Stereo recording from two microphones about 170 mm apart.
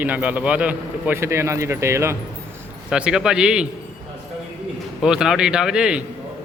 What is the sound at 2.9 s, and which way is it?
Speech, 5° right (ahead or behind).